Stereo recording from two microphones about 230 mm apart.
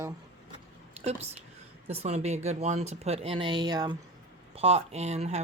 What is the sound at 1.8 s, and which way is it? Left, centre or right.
Speech, right.